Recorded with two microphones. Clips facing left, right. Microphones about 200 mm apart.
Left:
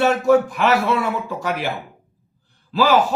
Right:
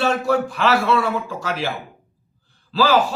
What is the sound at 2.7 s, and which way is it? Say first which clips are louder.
Speech: left 1 dB; 15° left (ahead or behind).